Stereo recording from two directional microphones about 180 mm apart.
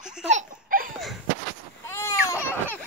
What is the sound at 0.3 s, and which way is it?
Laughter, 45° right (ahead or behind).